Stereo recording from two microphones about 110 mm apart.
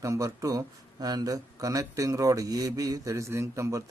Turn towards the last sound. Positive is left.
turn(degrees=-30)  # may be behind; listen again after turning